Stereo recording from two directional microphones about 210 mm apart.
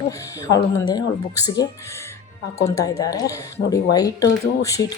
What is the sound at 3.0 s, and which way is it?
A woman's voice, 15° left (ahead or behind).